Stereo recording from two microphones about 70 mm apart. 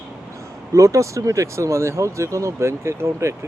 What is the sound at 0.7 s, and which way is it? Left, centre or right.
Speech, right.